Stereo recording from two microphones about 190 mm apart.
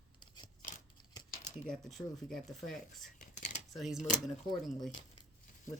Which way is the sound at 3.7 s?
Centre (ahead or behind).